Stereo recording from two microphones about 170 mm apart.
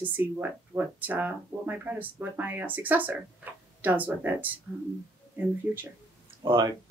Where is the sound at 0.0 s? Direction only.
10° right (ahead or behind).